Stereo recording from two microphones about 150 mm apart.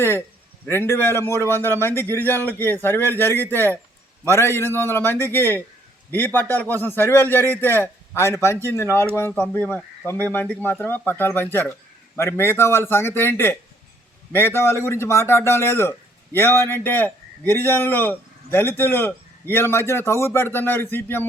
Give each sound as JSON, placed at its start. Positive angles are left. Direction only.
{"t": 0.7, "sound": "a man's voice", "side_deg": 15}